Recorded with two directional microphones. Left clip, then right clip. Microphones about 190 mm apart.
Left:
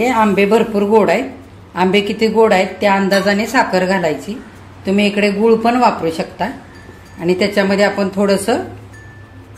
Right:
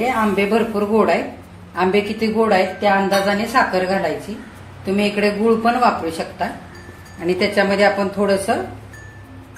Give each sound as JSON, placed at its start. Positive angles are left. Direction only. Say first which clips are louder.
{"t": 0.0, "sound": "a woman's voice", "louder": "left 5 dB", "side_deg": 40}